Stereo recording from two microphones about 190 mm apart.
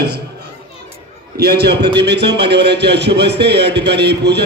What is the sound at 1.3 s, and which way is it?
A man's voice, 55° right (ahead or behind).